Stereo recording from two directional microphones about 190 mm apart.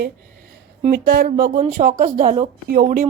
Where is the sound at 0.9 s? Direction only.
50° right (ahead or behind).